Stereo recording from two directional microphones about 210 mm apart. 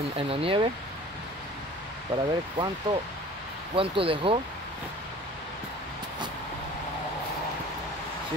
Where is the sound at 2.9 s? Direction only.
20° right (ahead or behind).